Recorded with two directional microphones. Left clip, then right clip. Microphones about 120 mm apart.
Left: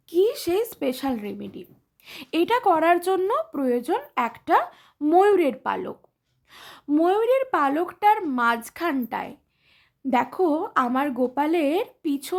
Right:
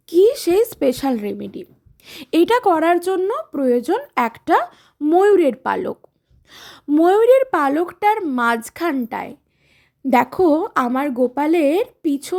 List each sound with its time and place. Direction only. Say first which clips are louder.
0.0 s a sound: right 8 dB; 45° right (ahead or behind)
2.0 s a woman's voice: right 7 dB; 35° right (ahead or behind); by 3.6 s 15° right (ahead or behind)
3.6 s a woman's voice: right 6 dB; 30° right (ahead or behind)
4.1 s speech: right 4 dB; 40° right (ahead or behind); by 5.5 s 25° right (ahead or behind)
5.6 s a woman's voice: right 6 dB; 45° right (ahead or behind)
6.5 s gasp: right 5 dB; 30° right (ahead or behind)
7.0 s a woman's voice: right 8 dB; 45° right (ahead or behind); by 9.4 s 30° right (ahead or behind)
10.1 s a woman's voice: right 7 dB; 45° right (ahead or behind); by 12.4 s 25° right (ahead or behind)